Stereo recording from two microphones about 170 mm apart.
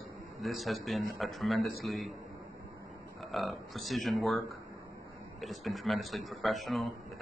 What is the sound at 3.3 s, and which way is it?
Speech, centre (ahead or behind).